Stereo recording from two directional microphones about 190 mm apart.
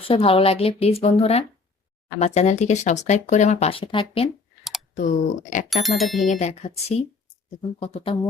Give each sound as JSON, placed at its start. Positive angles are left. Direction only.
{"t": 0.0, "sound": "speech", "side_deg": 30}
{"t": 4.9, "sound": "speech", "side_deg": 45}
{"t": 5.6, "sound": "speech", "side_deg": 0}
{"t": 6.2, "sound": "speech", "side_deg": 35}